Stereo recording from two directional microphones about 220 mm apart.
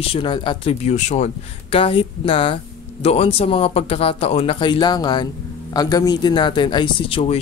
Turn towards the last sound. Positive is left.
turn(degrees=25)  # may be behind; listen again after turning